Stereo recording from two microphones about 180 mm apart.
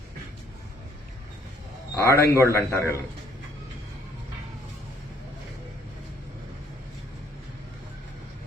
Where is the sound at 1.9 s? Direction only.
15° left (ahead or behind).